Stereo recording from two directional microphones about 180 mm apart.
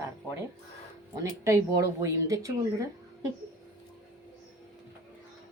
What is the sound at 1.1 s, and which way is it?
A woman's voice, 15° right (ahead or behind).